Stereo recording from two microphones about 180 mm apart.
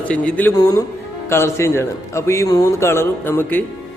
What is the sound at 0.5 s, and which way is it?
A man's voice, 20° left (ahead or behind).